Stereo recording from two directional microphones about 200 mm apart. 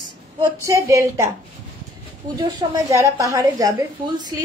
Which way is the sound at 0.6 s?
15° right (ahead or behind).